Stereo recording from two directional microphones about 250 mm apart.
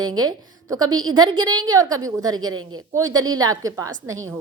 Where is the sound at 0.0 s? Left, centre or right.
Centre.